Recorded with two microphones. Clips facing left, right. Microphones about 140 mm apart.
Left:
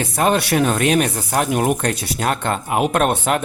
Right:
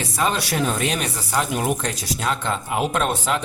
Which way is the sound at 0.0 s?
55° left (ahead or behind).